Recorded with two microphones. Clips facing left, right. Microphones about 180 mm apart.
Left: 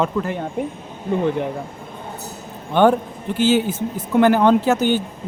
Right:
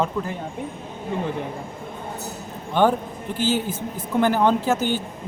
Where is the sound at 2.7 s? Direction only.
65° left (ahead or behind).